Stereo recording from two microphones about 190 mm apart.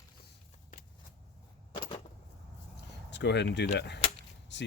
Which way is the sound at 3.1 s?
65° left (ahead or behind).